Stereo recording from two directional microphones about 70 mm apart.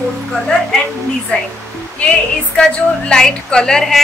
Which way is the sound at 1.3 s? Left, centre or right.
Centre.